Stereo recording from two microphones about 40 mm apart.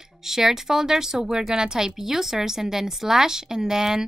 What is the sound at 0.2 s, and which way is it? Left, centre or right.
Speech, centre.